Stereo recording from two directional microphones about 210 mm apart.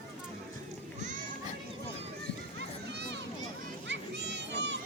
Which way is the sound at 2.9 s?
50° right (ahead or behind).